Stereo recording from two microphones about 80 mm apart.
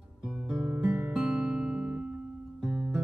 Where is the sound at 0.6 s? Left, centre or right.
Right.